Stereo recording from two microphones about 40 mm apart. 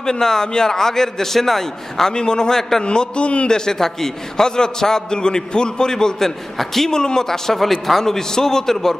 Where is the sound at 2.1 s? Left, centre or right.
Centre.